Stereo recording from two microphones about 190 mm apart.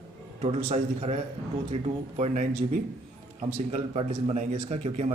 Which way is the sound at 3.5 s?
30° right (ahead or behind).